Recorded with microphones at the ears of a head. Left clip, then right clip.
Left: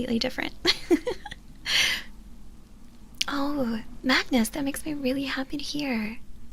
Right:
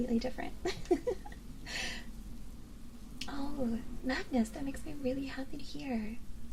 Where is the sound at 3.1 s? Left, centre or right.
Left.